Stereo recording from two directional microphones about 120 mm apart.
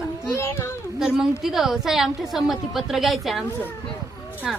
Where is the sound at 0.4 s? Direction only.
20° left (ahead or behind).